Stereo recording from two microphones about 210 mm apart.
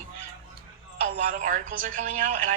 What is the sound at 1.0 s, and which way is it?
A woman's voice, 40° right (ahead or behind).